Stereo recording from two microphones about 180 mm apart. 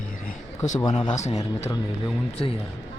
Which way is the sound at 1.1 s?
40° left (ahead or behind).